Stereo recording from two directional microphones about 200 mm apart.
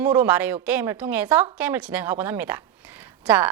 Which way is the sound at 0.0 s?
10° right (ahead or behind).